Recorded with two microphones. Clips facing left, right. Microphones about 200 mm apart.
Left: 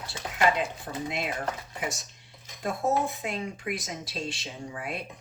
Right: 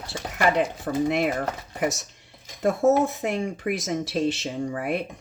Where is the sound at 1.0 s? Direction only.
60° right (ahead or behind).